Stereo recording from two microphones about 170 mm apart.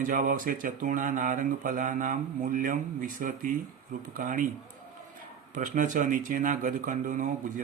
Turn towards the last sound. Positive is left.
turn(degrees=-50)  # may be behind; listen again after turning